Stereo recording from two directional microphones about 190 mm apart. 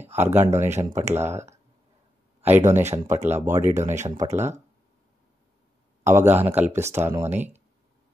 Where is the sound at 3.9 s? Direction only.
40° right (ahead or behind).